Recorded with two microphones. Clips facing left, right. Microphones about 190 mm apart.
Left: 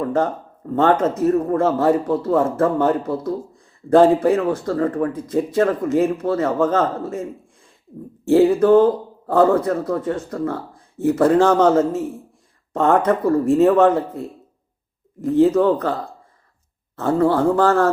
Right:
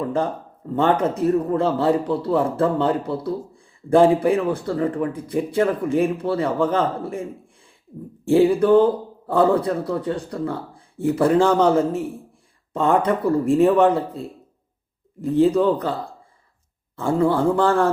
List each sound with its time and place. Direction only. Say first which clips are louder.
0.0 s speech: left 3 dB; 15° right (ahead or behind)
8.3 s speech: left 2 dB; 15° right (ahead or behind)
15.3 s speech: left 2 dB; 15° right (ahead or behind)
17.0 s speech: left 2 dB; 15° right (ahead or behind)